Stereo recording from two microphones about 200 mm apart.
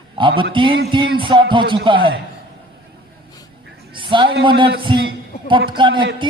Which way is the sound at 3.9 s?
25° right (ahead or behind).